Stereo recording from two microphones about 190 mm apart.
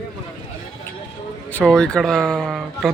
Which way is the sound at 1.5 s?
5° left (ahead or behind).